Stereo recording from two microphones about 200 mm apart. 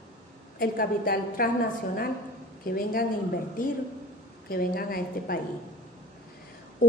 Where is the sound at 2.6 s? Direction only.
45° left (ahead or behind).